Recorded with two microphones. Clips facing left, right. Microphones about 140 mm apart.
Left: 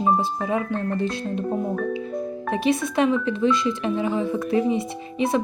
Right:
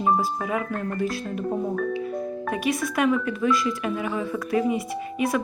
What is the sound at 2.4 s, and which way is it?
Speech, 30° left (ahead or behind).